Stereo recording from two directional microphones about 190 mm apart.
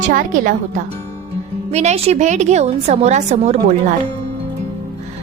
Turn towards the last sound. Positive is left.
turn(degrees=-40)  # may be behind; listen again after turning